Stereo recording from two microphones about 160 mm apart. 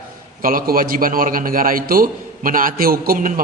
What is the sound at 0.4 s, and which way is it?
A man's voice, 65° right (ahead or behind).